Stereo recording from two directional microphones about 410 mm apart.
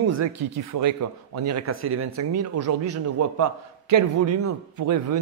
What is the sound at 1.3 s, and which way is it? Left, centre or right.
Speech, right.